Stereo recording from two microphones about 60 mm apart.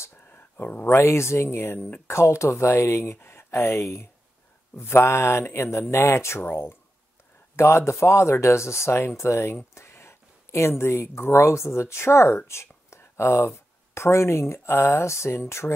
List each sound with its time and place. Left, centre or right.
0.0 s a sound: left
0.9 s speech: left
2.0 s speech: left
4.7 s speech: left
6.4 s speech: left
7.5 s speech: left